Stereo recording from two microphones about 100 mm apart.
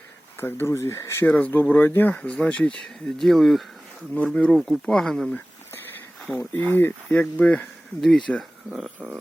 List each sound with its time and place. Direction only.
0.3 s speech: 25° left (ahead or behind); by 5.4 s 5° left (ahead or behind)
6.3 s speech: 20° left (ahead or behind); by 8.9 s centre (ahead or behind)